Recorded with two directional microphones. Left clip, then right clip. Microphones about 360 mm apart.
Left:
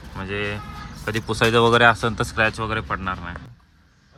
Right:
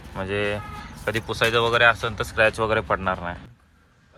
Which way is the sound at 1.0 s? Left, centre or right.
Centre.